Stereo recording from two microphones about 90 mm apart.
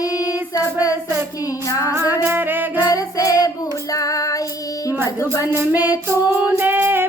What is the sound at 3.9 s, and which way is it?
Child singing, 40° left (ahead or behind).